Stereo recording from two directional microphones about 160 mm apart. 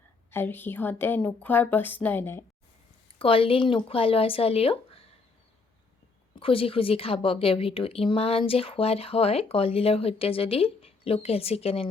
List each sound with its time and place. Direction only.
0.3 s a woman's voice: 15° left (ahead or behind)
3.2 s a woman's voice: 35° left (ahead or behind)
6.4 s a woman's voice: 35° left (ahead or behind)